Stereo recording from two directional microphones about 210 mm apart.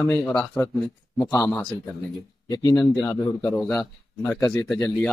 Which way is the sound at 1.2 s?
15° left (ahead or behind).